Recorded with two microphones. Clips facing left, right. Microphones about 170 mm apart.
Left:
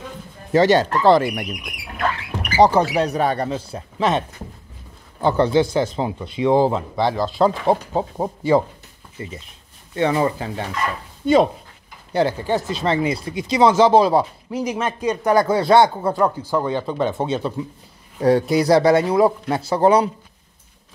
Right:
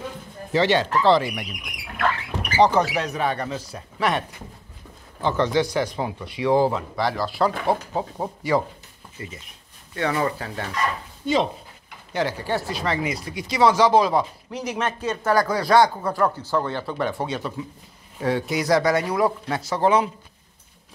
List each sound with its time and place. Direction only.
0.5 s speech: 45° left (ahead or behind)
2.6 s speech: 35° left (ahead or behind)
5.2 s speech: 35° left (ahead or behind)
12.1 s speech: 30° left (ahead or behind)
12.4 s speech: 20° left (ahead or behind)
14.5 s speech: 10° left (ahead or behind)
16.3 s speech: 10° left (ahead or behind); by 20.1 s 35° left (ahead or behind)